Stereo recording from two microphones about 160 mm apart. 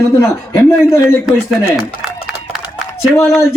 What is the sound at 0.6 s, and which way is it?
Speech, 15° left (ahead or behind).